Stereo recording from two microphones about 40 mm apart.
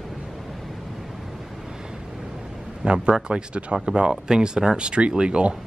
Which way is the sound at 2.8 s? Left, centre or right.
Right.